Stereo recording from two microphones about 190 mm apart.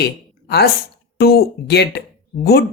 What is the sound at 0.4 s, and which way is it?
A woman's voice, 60° left (ahead or behind).